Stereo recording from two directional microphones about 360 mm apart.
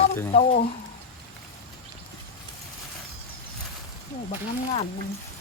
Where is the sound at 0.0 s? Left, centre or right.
Centre.